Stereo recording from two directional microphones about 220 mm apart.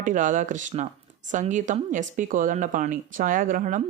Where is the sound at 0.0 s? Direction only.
35° right (ahead or behind).